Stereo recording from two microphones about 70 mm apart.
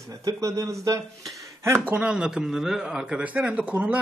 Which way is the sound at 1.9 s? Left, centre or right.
Centre.